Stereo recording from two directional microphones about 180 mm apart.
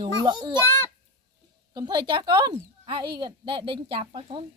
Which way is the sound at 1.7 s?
25° right (ahead or behind).